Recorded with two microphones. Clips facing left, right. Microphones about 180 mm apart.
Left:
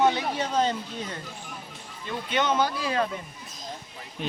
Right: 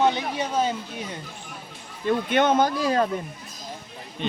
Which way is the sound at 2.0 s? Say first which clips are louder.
Right 6 dB; 55° right (ahead or behind).